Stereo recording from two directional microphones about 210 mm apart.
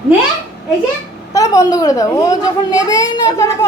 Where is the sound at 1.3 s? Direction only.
15° left (ahead or behind).